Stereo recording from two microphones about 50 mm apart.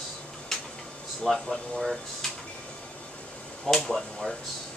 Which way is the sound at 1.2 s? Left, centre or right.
Centre.